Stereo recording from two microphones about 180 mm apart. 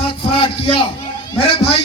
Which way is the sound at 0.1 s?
30° left (ahead or behind).